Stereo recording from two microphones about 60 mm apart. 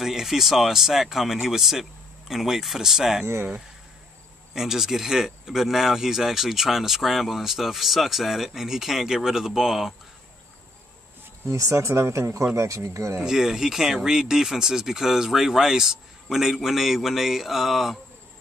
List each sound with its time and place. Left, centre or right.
0.0 s speech: centre
4.6 s speech: centre
11.4 s speech: right
13.2 s speech: centre